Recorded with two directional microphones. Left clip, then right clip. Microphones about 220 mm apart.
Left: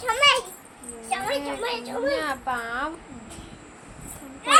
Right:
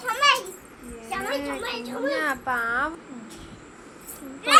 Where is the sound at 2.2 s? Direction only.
10° right (ahead or behind).